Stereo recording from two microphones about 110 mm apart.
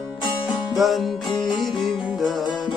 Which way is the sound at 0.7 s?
Centre (ahead or behind).